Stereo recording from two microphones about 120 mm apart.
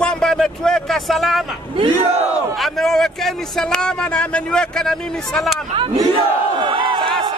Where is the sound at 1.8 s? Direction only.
55° right (ahead or behind).